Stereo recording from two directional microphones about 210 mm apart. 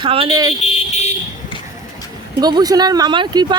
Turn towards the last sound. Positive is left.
turn(degrees=-20)  # may be behind; listen again after turning